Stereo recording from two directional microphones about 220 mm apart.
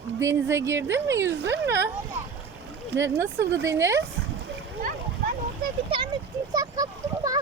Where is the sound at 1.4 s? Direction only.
50° right (ahead or behind).